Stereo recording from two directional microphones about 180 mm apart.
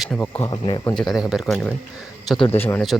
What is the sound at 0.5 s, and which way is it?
Speech, 25° left (ahead or behind).